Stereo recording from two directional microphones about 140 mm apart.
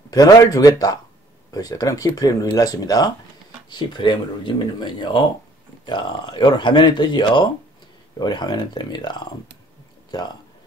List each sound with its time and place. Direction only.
0.1 s speech: 25° left (ahead or behind)